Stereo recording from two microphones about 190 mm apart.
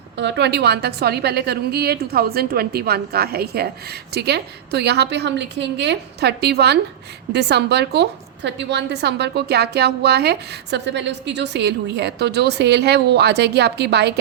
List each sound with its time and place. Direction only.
0.2 s a woman's voice: 65° right (ahead or behind)